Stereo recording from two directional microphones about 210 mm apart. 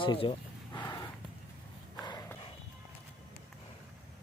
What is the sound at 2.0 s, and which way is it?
Horse, 20° left (ahead or behind).